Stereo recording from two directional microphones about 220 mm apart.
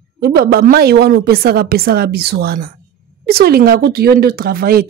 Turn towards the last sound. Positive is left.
turn(degrees=-40)  # may be behind; listen again after turning